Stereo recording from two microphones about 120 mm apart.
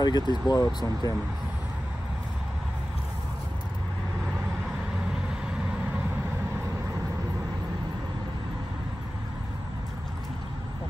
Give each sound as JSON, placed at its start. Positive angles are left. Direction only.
{"t": 0.0, "sound": "speech", "side_deg": 35}